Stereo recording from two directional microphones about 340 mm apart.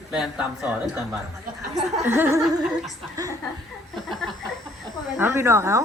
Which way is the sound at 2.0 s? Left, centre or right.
Centre.